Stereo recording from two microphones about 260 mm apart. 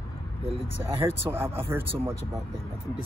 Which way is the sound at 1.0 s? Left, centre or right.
Centre.